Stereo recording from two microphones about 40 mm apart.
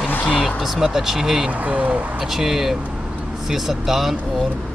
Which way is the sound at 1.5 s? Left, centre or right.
Right.